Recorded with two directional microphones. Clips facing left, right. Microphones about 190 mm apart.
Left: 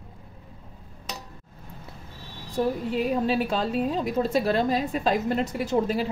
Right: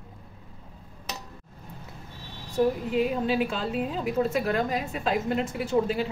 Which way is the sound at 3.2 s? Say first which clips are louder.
Left 2 dB; 35° left (ahead or behind).